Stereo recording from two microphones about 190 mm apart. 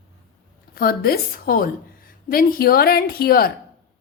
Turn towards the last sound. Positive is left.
turn(degrees=50)  # may be behind; listen again after turning